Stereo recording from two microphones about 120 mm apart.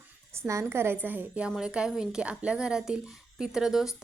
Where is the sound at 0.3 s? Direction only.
25° right (ahead or behind).